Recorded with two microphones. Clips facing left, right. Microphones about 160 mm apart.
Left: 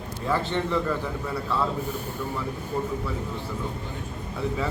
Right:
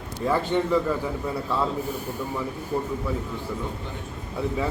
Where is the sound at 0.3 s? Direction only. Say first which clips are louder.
Right 3 dB; 10° right (ahead or behind).